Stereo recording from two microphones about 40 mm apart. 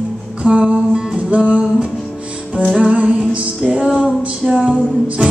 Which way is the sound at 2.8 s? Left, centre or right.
Right.